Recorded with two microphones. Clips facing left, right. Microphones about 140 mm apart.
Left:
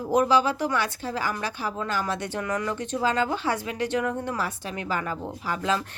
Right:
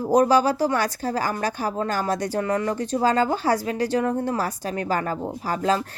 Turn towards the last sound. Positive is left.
turn(degrees=-40)  # may be behind; listen again after turning